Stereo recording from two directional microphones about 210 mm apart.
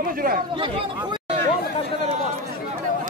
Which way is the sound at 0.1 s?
45° right (ahead or behind).